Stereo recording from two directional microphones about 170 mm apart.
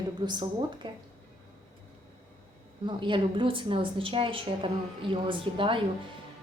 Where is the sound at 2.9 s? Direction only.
30° right (ahead or behind).